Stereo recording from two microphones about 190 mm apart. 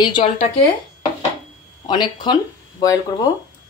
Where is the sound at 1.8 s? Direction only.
25° left (ahead or behind).